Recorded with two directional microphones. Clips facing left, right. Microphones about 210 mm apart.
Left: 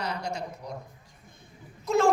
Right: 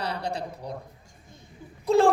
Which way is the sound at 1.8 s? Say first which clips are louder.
Right 4 dB; 30° right (ahead or behind).